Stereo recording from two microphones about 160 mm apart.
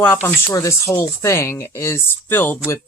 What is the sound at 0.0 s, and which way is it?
Speech, 10° left (ahead or behind).